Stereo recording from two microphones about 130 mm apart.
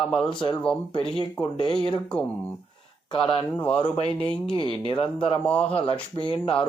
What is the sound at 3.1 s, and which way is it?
Speech, 40° left (ahead or behind).